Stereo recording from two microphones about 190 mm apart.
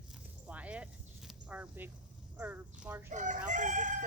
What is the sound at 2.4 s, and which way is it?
Speech, 5° right (ahead or behind).